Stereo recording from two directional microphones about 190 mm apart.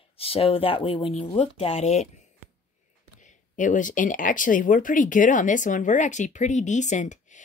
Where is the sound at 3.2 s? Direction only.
40° left (ahead or behind).